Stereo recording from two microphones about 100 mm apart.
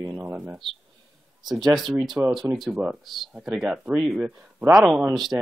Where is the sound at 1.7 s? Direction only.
Centre (ahead or behind).